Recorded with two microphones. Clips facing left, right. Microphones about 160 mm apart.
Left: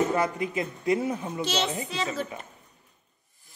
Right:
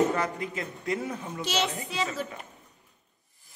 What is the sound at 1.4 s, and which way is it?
Speech, 10° right (ahead or behind).